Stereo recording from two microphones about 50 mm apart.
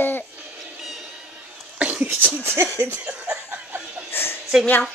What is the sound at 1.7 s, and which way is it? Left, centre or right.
Cough, right.